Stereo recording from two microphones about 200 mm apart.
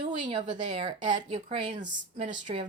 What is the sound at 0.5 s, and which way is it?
A woman's voice, 35° right (ahead or behind).